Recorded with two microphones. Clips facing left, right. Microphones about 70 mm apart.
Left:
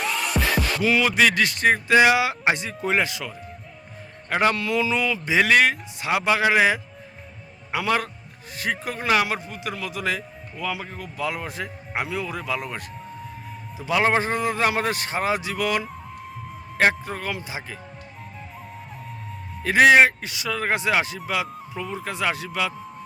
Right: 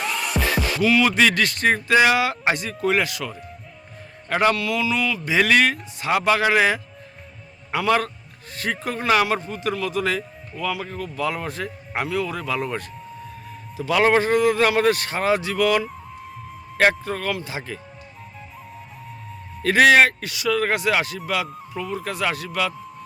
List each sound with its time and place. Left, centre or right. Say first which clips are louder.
0.0 s music: even; centre
0.8 s speech: right 4 dB; centre
1.0 s a man's voice: right 1 dB; centre; by 3.2 s left
4.3 s a man's voice: right 2 dB; centre
4.5 s a man's voice: even; left; by 17.7 s centre
19.6 s speech: even; centre
21.4 s speech: right 2 dB; centre
21.9 s speech: right 1 dB; centre